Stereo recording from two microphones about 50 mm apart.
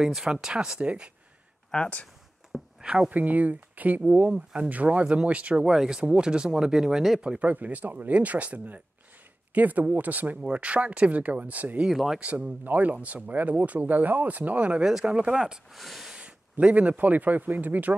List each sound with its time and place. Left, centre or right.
0.0 s speech: centre
1.7 s speech: centre
2.8 s speech: centre
3.1 s speech: right
4.3 s speech: centre
4.6 s speech: right
5.7 s speech: centre
7.2 s speech: right
14.8 s speech: centre
15.7 s speech: centre
16.1 s speech: right